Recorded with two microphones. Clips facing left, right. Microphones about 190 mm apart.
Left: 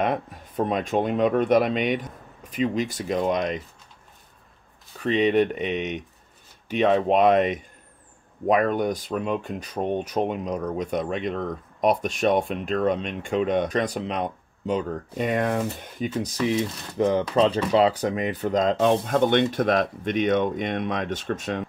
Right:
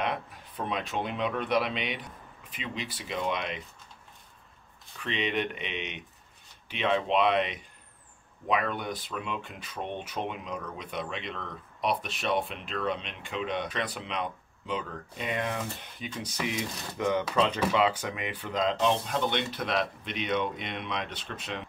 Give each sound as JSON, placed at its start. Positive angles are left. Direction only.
{"t": 0.0, "sound": "speech", "side_deg": 45}
{"t": 4.9, "sound": "speech", "side_deg": 40}
{"t": 16.4, "sound": "speech", "side_deg": 35}